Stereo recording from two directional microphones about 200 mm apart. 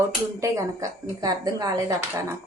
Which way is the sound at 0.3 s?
15° right (ahead or behind).